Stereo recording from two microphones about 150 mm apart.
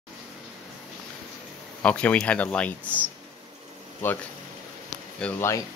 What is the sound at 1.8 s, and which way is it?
Speech, 10° left (ahead or behind).